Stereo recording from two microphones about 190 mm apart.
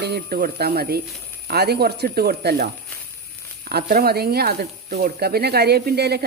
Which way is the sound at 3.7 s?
55° right (ahead or behind).